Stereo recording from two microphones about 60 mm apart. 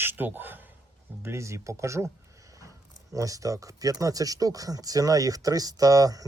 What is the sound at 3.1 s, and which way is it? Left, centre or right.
Speech, right.